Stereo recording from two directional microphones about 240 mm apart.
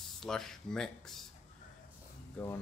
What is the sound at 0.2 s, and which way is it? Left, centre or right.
Speech, centre.